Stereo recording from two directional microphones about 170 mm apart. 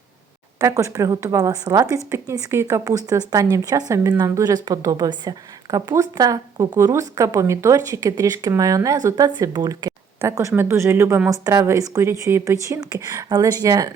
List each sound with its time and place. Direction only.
0.6 s speech: 20° right (ahead or behind)